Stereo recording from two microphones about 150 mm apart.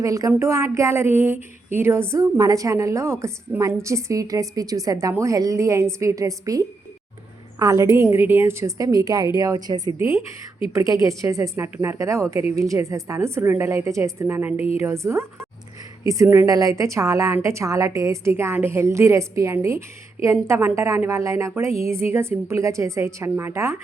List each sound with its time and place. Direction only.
0.0 s a woman's voice: 25° right (ahead or behind)